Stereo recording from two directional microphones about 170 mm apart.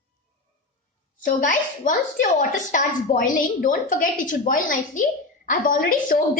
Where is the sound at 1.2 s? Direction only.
50° left (ahead or behind).